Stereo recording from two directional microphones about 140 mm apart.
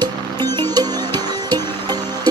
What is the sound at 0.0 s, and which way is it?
Music, 30° right (ahead or behind).